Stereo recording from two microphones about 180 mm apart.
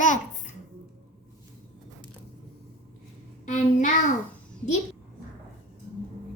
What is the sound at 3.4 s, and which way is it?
Speech, 45° left (ahead or behind).